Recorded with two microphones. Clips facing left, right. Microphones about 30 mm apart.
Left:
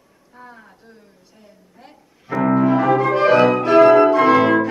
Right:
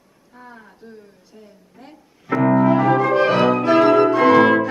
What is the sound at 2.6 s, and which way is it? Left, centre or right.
Music, centre.